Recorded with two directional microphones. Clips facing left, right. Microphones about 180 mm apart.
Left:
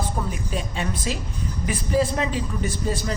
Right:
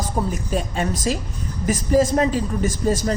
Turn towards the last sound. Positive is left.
turn(degrees=-45)  # may be behind; listen again after turning